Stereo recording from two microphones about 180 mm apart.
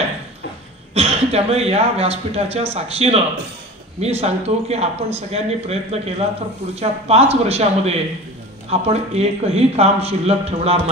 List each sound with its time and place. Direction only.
0.9 s speech: 35° right (ahead or behind)